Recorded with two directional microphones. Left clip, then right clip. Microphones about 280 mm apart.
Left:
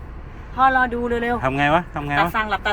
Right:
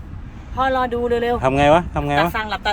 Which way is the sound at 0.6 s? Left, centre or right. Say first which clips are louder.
Left 2 dB; centre.